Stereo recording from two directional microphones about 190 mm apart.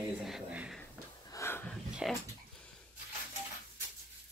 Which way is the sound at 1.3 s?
15° left (ahead or behind).